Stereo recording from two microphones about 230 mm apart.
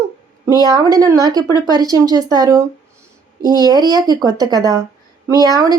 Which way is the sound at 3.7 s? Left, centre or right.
Centre.